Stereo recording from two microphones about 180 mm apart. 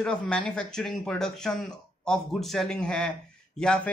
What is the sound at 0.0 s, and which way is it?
Speech, 5° left (ahead or behind).